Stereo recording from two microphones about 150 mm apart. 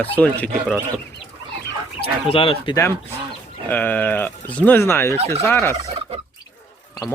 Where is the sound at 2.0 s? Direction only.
40° left (ahead or behind).